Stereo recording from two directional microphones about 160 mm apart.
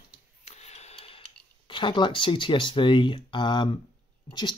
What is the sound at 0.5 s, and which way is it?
Mechanisms, 45° left (ahead or behind).